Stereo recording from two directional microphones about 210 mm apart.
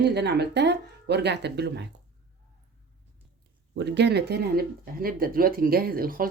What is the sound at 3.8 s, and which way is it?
Speech, 55° right (ahead or behind).